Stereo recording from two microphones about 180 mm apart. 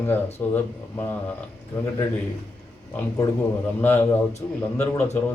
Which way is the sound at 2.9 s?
10° left (ahead or behind).